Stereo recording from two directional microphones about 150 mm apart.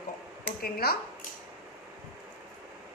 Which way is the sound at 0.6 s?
90° left.